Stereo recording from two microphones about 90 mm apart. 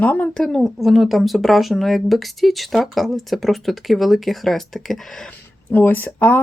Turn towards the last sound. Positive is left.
turn(degrees=20)  # may be behind; listen again after turning